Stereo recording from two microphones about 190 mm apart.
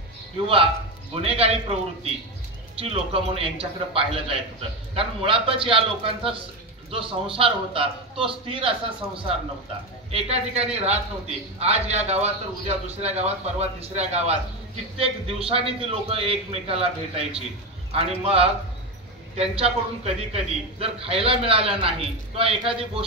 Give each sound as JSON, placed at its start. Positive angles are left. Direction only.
{"t": 1.1, "sound": "a man's voice", "side_deg": -30}
{"t": 2.8, "sound": "a man's voice", "side_deg": -30}